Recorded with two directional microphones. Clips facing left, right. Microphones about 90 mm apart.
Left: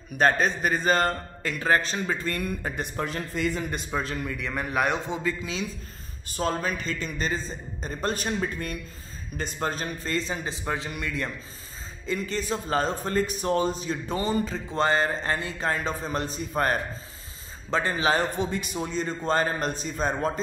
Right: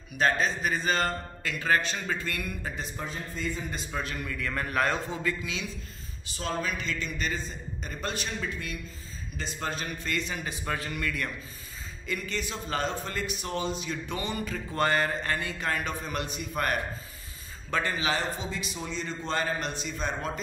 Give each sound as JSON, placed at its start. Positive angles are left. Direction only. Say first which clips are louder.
{"t": 0.2, "sound": "a man's voice", "louder": "left 4 dB", "side_deg": 45}
{"t": 2.8, "sound": "speech", "louder": "left 6 dB", "side_deg": 65}
{"t": 3.9, "sound": "a man's voice", "louder": "left 4 dB", "side_deg": 30}
{"t": 6.2, "sound": "a man's voice", "louder": "left 5 dB", "side_deg": 45}
{"t": 12.1, "sound": "a man's voice", "louder": "left 5 dB", "side_deg": 35}
{"t": 18.4, "sound": "a man's voice", "louder": "left 7 dB", "side_deg": 50}